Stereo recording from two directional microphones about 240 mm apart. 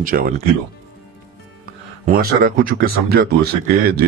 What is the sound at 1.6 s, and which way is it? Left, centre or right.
Speech, right.